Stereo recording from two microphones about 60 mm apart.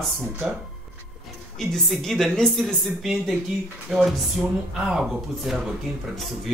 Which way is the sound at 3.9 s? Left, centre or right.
Centre.